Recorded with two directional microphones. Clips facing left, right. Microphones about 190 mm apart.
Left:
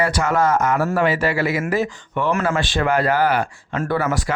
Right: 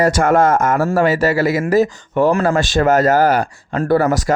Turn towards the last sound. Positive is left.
turn(degrees=-40)  # may be behind; listen again after turning